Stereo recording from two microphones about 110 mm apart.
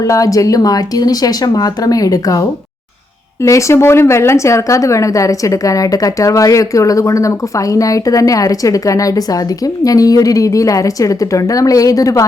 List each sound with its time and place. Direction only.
0.0 s speech: 30° left (ahead or behind)